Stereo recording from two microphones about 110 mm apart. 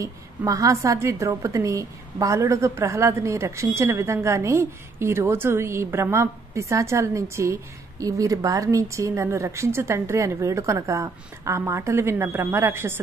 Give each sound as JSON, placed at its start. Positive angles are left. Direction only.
{"t": 0.0, "sound": "a woman's voice", "side_deg": -30}